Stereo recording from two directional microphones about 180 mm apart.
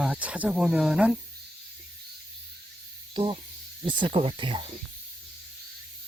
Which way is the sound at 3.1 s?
25° right (ahead or behind).